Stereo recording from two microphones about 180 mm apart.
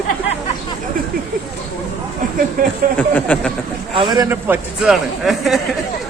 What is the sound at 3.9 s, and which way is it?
Speech, 25° right (ahead or behind).